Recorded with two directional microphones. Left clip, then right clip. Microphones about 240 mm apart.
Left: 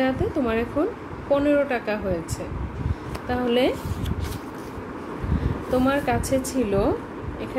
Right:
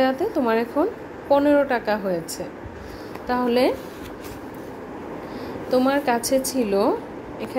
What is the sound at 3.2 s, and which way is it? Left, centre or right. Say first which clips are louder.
Speech: right 2 dB; right.